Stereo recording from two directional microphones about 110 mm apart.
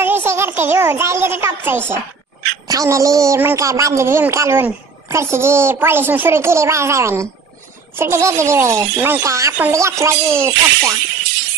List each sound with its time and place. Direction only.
0.0 s a child's voice: 20° right (ahead or behind)
2.7 s a child's voice: 30° right (ahead or behind)